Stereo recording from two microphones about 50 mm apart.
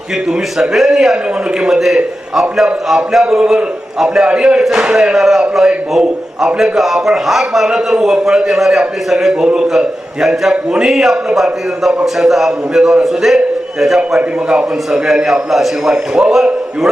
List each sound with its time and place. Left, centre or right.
0.3 s a man's voice: centre
5.1 s a man's voice: centre
14.2 s a man's voice: centre